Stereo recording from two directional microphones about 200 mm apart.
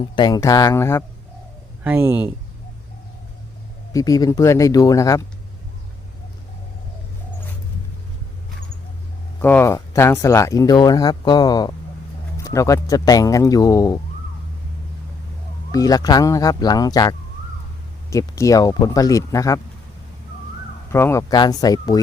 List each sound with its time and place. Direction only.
0.0 s speech: 20° left (ahead or behind)
1.8 s speech: 10° right (ahead or behind)
3.9 s speech: 15° left (ahead or behind)
9.4 s speech: 10° left (ahead or behind)
15.7 s speech: 20° left (ahead or behind)
20.9 s speech: 15° left (ahead or behind)